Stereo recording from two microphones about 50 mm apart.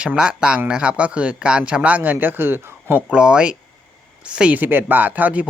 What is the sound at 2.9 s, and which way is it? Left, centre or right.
Speech, right.